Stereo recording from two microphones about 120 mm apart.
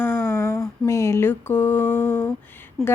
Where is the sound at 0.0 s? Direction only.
20° left (ahead or behind).